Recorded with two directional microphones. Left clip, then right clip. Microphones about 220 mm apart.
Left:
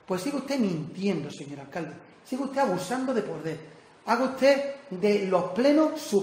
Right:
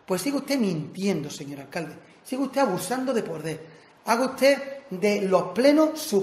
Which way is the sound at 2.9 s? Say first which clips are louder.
Right 2 dB; 45° right (ahead or behind).